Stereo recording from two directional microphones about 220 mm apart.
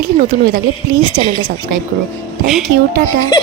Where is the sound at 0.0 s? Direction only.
40° right (ahead or behind).